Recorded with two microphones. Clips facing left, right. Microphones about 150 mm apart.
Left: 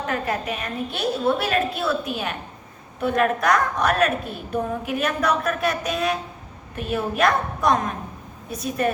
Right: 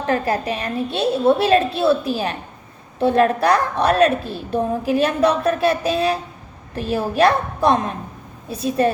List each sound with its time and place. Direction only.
0.1 s a woman's voice: 35° right (ahead or behind)